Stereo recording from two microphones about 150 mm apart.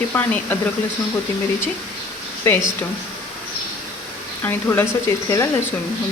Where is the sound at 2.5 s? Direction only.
15° left (ahead or behind).